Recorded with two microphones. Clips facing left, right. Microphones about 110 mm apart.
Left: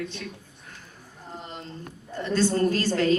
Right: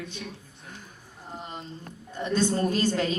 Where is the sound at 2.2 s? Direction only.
15° right (ahead or behind).